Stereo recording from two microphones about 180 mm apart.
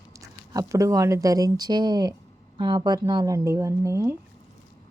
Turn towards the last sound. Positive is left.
turn(degrees=-15)  # may be behind; listen again after turning